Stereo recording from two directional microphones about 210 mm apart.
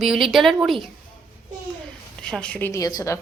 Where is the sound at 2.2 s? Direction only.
5° left (ahead or behind).